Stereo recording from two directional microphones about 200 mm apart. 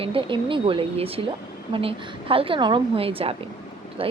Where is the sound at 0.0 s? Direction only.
25° right (ahead or behind).